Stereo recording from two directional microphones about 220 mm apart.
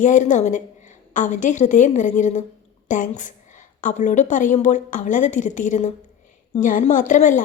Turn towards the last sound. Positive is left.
turn(degrees=35)  # may be behind; listen again after turning